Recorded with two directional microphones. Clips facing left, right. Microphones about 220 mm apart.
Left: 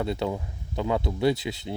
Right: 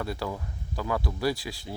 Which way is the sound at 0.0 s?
20° left (ahead or behind).